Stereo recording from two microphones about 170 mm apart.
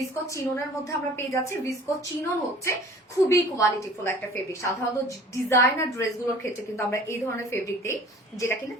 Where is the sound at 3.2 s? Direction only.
15° left (ahead or behind).